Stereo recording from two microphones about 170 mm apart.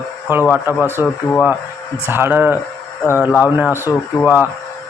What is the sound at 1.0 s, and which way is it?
Speech, 15° right (ahead or behind).